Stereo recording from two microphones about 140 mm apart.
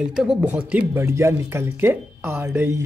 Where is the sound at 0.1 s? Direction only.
5° right (ahead or behind).